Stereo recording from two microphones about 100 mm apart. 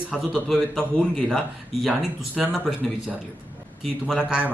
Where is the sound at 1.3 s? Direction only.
5° right (ahead or behind).